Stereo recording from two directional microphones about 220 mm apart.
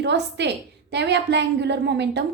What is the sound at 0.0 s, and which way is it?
A woman's voice, 50° right (ahead or behind).